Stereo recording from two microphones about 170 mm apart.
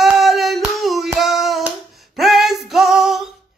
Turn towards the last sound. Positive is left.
turn(degrees=0)  # may be behind; listen again after turning